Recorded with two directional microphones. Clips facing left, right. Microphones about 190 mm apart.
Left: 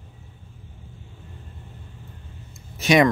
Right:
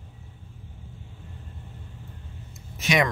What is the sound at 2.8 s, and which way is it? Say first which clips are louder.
Speech: left 7 dB; 35° left (ahead or behind).